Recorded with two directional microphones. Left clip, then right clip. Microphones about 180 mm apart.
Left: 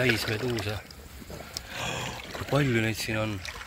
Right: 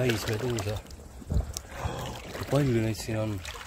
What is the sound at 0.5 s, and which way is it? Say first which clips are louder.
Speech: left 1 dB; centre (ahead or behind).